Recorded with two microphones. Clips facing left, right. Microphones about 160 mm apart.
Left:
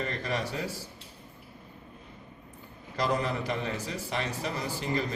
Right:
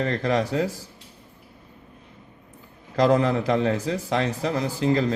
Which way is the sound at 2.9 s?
90° right.